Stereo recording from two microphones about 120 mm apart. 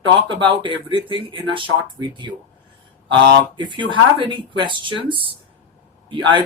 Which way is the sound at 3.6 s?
40° right (ahead or behind).